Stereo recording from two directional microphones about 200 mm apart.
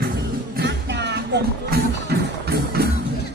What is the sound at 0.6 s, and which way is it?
Music, 60° right (ahead or behind).